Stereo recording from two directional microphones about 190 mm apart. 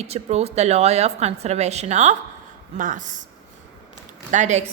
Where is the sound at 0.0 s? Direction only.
35° right (ahead or behind).